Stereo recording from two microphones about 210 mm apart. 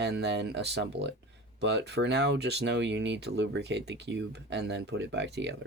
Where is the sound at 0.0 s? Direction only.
55° right (ahead or behind).